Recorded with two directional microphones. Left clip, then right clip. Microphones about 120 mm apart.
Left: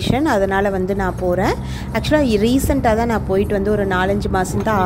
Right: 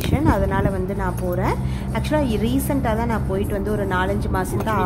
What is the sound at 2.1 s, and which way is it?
A woman's voice, 40° left (ahead or behind).